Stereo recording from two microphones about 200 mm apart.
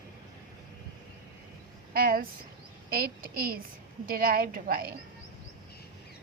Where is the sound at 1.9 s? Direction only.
45° right (ahead or behind).